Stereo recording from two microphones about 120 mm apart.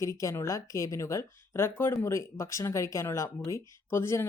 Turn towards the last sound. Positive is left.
turn(degrees=20)  # may be behind; listen again after turning